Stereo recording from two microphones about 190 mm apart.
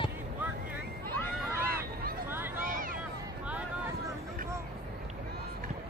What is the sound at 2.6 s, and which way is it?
Vehicle, 45° right (ahead or behind).